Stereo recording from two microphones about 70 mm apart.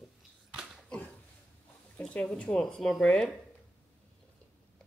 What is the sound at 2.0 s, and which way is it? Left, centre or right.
Speech, centre.